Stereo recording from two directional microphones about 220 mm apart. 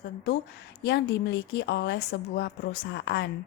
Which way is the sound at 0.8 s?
50° left (ahead or behind).